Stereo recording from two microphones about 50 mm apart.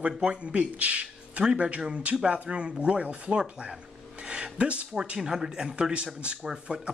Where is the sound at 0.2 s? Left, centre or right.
Right.